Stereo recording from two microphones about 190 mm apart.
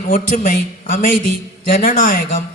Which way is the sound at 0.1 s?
45° left (ahead or behind).